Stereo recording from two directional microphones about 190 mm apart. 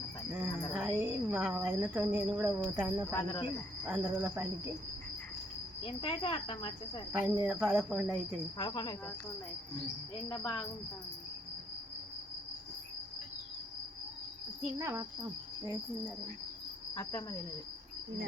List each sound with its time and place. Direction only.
0.3 s a sound: 10° right (ahead or behind)
2.0 s speech: 10° right (ahead or behind)
3.1 s cricket: 15° left (ahead or behind)
3.8 s speech: 10° right (ahead or behind)
5.8 s cricket: 25° left (ahead or behind)
7.1 s cricket: 5° right (ahead or behind)
8.5 s cricket: 20° left (ahead or behind)
10.2 s cricket: 15° left (ahead or behind)
14.8 s speech: 15° right (ahead or behind)
16.9 s cricket: 20° left (ahead or behind)